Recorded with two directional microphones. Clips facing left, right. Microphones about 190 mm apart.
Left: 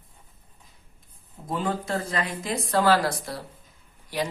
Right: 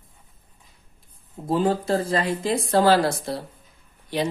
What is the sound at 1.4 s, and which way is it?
Speech, 35° right (ahead or behind).